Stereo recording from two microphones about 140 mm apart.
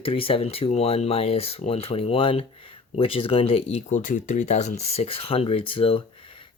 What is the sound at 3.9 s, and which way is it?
Speech, 65° left (ahead or behind).